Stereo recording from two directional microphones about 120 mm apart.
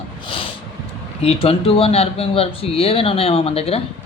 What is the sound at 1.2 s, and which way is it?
Speech, 55° left (ahead or behind).